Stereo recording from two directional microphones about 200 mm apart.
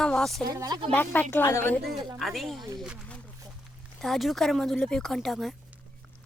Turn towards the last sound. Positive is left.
turn(degrees=0)  # may be behind; listen again after turning